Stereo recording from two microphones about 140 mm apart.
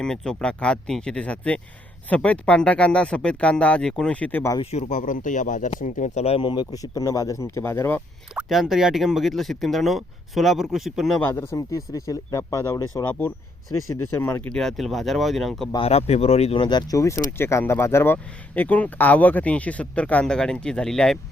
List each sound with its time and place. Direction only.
0.0 s speech: 5° left (ahead or behind)
4.6 s speech: 50° left (ahead or behind); by 8.0 s 15° left (ahead or behind)
8.4 s speech: 5° right (ahead or behind)
11.2 s speech: 20° left (ahead or behind)
14.5 s speech: 5° left (ahead or behind)
15.7 s speech: 45° left (ahead or behind)
16.6 s speech: 30° left (ahead or behind); by 21.2 s 5° left (ahead or behind)